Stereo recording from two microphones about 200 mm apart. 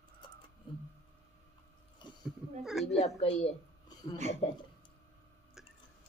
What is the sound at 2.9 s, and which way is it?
Speech, 35° left (ahead or behind).